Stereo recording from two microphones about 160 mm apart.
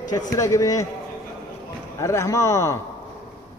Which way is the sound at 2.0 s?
15° left (ahead or behind).